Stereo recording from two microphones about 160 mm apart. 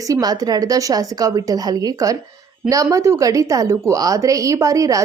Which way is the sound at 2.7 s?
20° right (ahead or behind).